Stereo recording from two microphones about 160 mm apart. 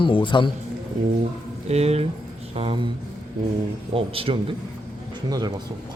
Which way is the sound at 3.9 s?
35° right (ahead or behind).